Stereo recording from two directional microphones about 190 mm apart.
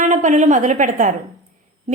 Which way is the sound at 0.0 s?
40° right (ahead or behind).